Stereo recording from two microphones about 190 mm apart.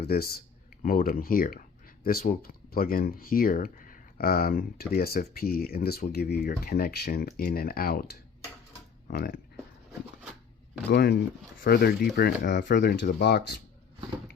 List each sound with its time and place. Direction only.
0.0 s speech: 55° left (ahead or behind)
9.0 s speech: 60° left (ahead or behind)
10.8 s speech: 60° left (ahead or behind)